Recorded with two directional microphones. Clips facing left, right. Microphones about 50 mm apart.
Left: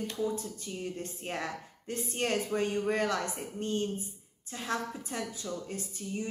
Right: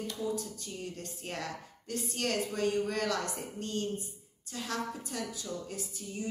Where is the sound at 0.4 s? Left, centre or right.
Left.